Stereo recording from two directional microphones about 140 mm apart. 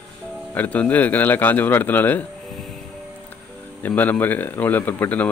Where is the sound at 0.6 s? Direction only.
10° left (ahead or behind).